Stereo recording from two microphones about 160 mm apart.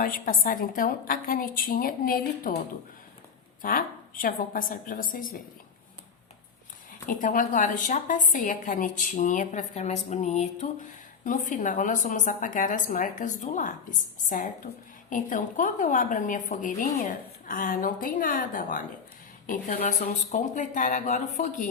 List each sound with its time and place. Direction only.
0.0 s a woman's voice: 60° left (ahead or behind)
3.6 s a woman's voice: 60° left (ahead or behind)
7.1 s a woman's voice: 55° left (ahead or behind)
11.2 s a woman's voice: 55° left (ahead or behind)
15.1 s a woman's voice: 55° left (ahead or behind)
19.5 s a woman's voice: 45° left (ahead or behind)